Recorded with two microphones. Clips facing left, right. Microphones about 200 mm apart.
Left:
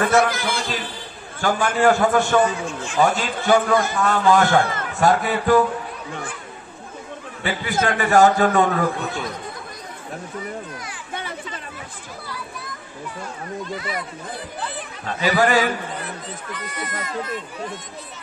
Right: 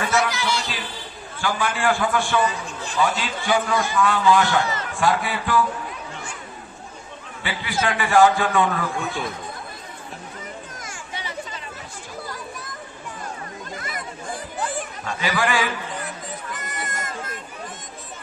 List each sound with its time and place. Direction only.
0.0 s a man's voice: 50° left (ahead or behind)
7.4 s a man's voice: 45° left (ahead or behind)
11.1 s chatter: 50° left (ahead or behind)
12.3 s children playing: 45° right (ahead or behind)
13.7 s speech: 45° right (ahead or behind)
15.0 s a man's voice: 45° left (ahead or behind)
16.5 s speech: 45° right (ahead or behind)